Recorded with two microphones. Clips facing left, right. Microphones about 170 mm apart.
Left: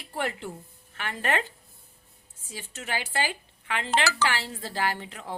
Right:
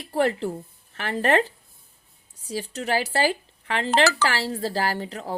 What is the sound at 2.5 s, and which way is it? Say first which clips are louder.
Speech: right 9 dB; 40° right (ahead or behind).